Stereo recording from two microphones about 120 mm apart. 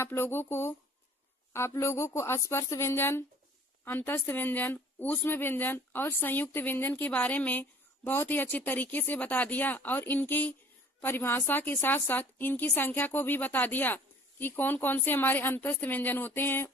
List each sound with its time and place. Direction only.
0.0 s a woman's voice: 20° left (ahead or behind)